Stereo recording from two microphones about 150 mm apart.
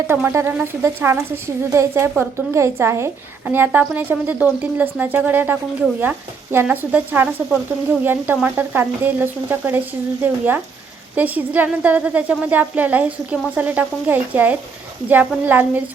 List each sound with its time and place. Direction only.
0.1 s a woman's voice: 15° right (ahead or behind)